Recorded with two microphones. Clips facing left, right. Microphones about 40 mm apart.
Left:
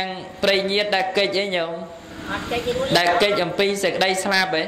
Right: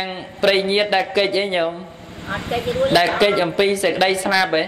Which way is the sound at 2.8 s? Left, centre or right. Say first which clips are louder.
Right 3 dB; centre.